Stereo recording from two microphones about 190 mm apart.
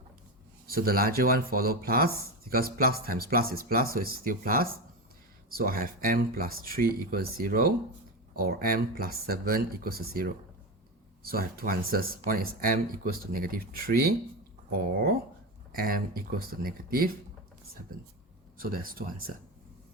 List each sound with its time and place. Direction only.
0.7 s speech: 50° right (ahead or behind)
15.7 s speech: 50° right (ahead or behind)
18.5 s speech: 50° right (ahead or behind)